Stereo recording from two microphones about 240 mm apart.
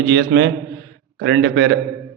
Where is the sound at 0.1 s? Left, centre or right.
Right.